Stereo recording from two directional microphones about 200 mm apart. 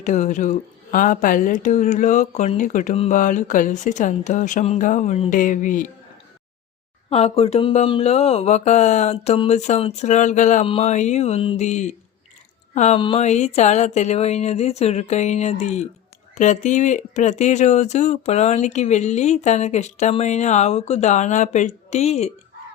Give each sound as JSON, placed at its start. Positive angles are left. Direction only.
{"t": 0.0, "sound": "speech", "side_deg": 35}
{"t": 7.1, "sound": "speech", "side_deg": 30}